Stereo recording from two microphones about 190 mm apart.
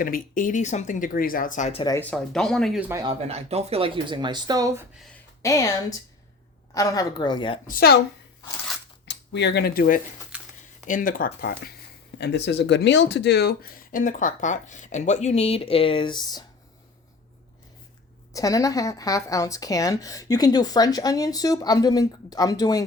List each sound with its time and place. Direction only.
0.0 s speech: 45° left (ahead or behind)
2.0 s speech: 5° left (ahead or behind)
2.9 s speech: 20° right (ahead or behind)
3.2 s speech: 35° right (ahead or behind); by 4.9 s 15° right (ahead or behind)
5.4 s speech: 15° left (ahead or behind)
7.7 s speech: 55° left (ahead or behind)
9.0 s speech: 65° left (ahead or behind); by 10.0 s 50° left (ahead or behind)
10.3 s a sound: 5° right (ahead or behind)
10.8 s speech: 45° left (ahead or behind)
12.1 s speech: 65° left (ahead or behind); by 16.4 s 25° left (ahead or behind)
18.3 s speech: 15° left (ahead or behind)